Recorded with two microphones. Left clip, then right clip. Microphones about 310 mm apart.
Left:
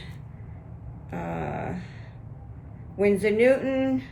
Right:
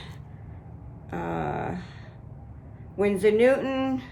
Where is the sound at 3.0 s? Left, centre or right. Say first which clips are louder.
Even; centre.